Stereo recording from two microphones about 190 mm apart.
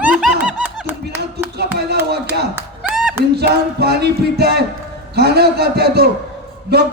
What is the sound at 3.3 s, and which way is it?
A man's voice, 60° right (ahead or behind).